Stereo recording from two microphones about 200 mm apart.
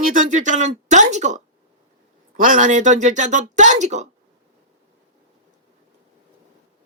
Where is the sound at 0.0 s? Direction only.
40° right (ahead or behind).